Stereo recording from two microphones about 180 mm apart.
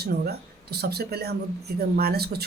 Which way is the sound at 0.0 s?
60° right (ahead or behind).